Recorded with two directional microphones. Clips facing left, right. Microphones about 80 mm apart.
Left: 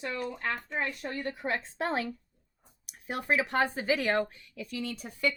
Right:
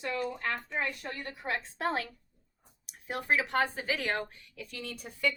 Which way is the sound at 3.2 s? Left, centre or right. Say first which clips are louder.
Left 1 dB; centre.